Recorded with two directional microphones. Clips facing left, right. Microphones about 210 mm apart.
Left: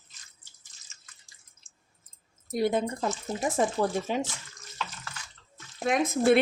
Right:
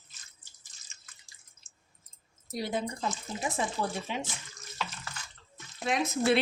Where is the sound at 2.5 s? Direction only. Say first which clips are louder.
Left 7 dB; 50° left (ahead or behind).